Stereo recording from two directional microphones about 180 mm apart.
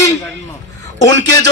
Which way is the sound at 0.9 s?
20° left (ahead or behind).